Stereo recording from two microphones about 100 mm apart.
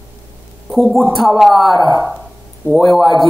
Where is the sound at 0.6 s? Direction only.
Centre (ahead or behind).